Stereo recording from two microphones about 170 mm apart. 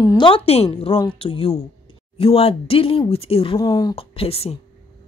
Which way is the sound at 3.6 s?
20° left (ahead or behind).